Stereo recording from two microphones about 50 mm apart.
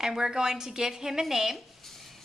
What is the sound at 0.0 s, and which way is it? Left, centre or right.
A woman's voice, centre.